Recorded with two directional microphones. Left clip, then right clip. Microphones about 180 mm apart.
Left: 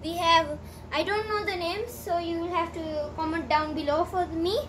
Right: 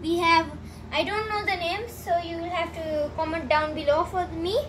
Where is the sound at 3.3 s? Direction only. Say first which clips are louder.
Right 1 dB; 20° left (ahead or behind).